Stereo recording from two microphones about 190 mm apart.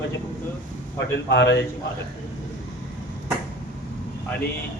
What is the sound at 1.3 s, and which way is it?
Speech, 65° left (ahead or behind).